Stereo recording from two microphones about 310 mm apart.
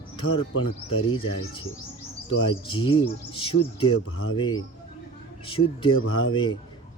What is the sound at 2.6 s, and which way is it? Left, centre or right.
Speech, centre.